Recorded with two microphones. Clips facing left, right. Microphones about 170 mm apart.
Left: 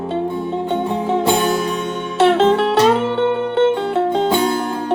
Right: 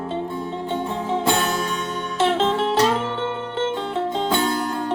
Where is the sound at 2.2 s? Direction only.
70° left (ahead or behind).